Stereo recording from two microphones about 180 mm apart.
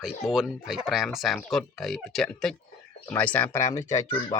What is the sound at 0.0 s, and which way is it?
Speech, 5° right (ahead or behind).